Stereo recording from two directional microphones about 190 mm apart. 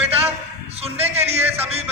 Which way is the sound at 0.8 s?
30° right (ahead or behind).